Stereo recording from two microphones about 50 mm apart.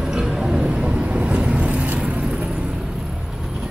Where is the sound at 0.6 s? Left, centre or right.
Right.